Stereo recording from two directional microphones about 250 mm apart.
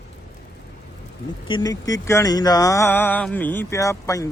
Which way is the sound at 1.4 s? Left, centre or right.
Centre.